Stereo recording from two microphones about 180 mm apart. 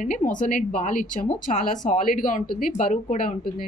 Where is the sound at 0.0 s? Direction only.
45° left (ahead or behind).